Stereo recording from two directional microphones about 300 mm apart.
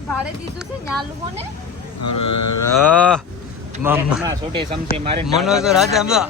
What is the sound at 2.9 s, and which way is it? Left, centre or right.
A man's voice, centre.